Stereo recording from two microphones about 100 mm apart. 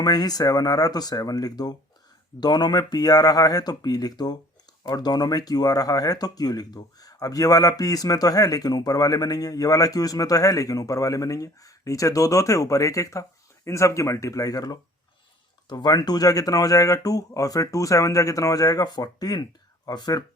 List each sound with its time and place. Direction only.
0.0 s speech: 40° left (ahead or behind)